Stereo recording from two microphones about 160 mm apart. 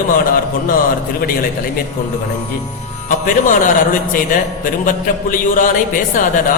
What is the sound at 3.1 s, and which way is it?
A man's voice, 55° left (ahead or behind).